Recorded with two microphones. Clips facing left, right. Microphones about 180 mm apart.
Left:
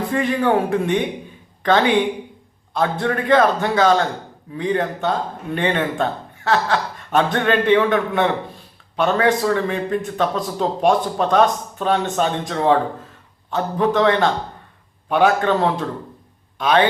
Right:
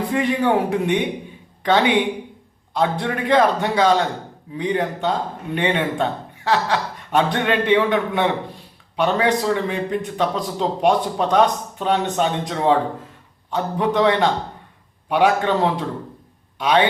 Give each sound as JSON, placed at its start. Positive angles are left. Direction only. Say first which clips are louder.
{"t": 0.1, "sound": "a man's voice", "louder": "left 1 dB", "side_deg": -20}